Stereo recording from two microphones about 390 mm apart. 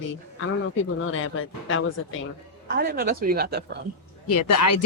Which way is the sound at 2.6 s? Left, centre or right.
Right.